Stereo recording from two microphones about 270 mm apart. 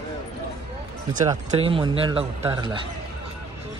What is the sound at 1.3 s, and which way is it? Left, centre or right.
Speech, centre.